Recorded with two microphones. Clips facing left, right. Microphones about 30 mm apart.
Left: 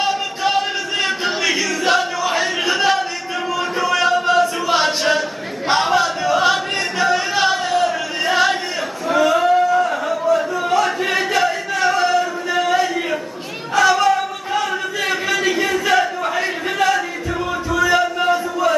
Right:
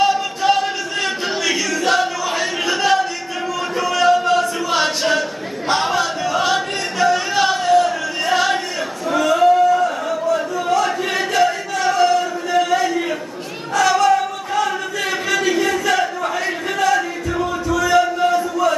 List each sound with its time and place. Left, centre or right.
0.0 s choir: centre
3.7 s chant: centre
4.8 s a sound: centre
13.7 s cat: centre
14.5 s crowd: centre
17.4 s a sound: centre